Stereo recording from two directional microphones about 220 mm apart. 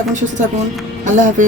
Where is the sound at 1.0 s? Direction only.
35° right (ahead or behind).